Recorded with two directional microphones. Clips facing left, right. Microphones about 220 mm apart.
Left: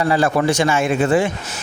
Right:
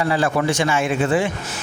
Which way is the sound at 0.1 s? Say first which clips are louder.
Left 3 dB; 40° left (ahead or behind).